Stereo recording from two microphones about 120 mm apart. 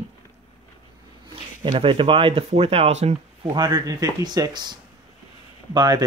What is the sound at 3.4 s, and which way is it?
Speech, 35° right (ahead or behind).